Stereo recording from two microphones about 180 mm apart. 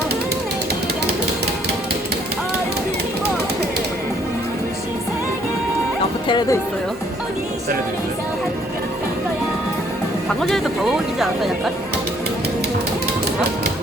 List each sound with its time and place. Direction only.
6.2 s speech: 25° left (ahead or behind)
10.4 s speech: centre (ahead or behind)